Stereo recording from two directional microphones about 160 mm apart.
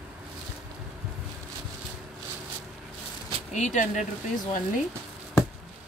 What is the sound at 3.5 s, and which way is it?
Speech, 50° left (ahead or behind).